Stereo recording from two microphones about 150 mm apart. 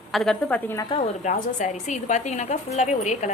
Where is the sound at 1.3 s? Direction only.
55° left (ahead or behind).